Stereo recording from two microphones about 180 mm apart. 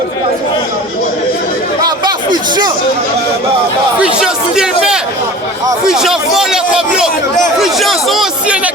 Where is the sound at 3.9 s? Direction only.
5° right (ahead or behind).